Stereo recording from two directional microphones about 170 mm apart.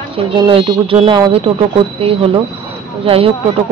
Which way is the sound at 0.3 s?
30° right (ahead or behind).